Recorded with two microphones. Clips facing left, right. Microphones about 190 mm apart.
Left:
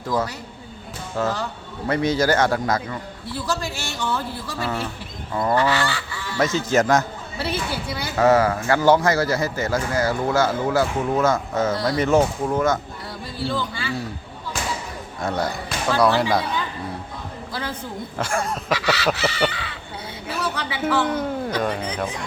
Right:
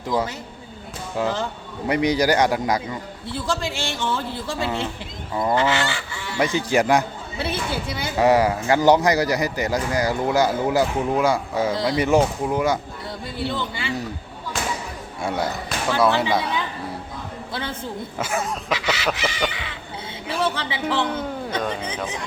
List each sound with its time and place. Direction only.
0.1 s speech: 20° right (ahead or behind)
1.1 s goose: 15° right (ahead or behind)
3.4 s speech: 25° right (ahead or behind)
5.3 s goose: 20° right (ahead or behind)
13.4 s speech: 20° right (ahead or behind)
15.2 s goose: 10° right (ahead or behind)
17.5 s a woman's voice: 25° right (ahead or behind)
18.2 s a sound: 5° right (ahead or behind)
18.7 s a sound: 20° right (ahead or behind)
20.4 s a sound: 25° right (ahead or behind)
20.8 s a man's voice: centre (ahead or behind)